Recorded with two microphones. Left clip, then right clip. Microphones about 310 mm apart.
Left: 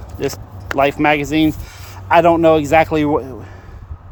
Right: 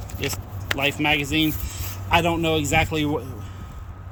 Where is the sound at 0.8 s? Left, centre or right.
Left.